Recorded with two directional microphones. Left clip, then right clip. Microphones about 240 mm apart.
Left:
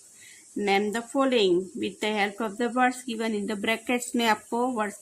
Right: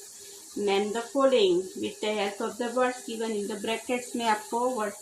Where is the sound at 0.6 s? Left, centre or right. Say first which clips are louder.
Left 2 dB; left.